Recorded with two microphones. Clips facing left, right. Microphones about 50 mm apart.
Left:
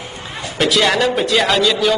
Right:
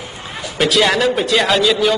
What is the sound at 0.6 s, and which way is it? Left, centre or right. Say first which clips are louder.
A man's voice: right 1 dB; centre.